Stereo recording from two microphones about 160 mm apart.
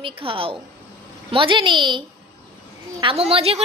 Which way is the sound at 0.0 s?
35° right (ahead or behind).